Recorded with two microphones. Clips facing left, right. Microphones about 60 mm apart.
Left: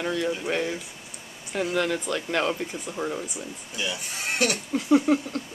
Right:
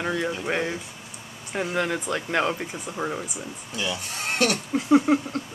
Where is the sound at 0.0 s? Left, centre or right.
Centre.